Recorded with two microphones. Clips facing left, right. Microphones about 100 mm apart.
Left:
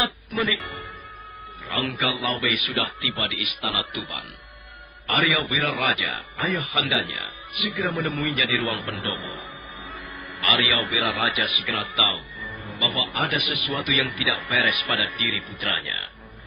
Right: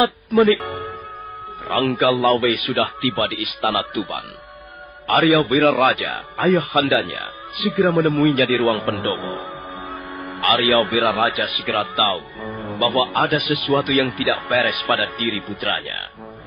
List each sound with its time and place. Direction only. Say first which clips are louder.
0.0 s speech: right 11 dB; 40° right (ahead or behind)
2.0 s speech: right 13 dB; 40° right (ahead or behind)
10.1 s music: right 6 dB; 50° right (ahead or behind)
10.9 s speech: right 7 dB; 50° right (ahead or behind)
11.9 s speech: right 7 dB; 45° right (ahead or behind)
13.3 s speech: right 9 dB; 40° right (ahead or behind)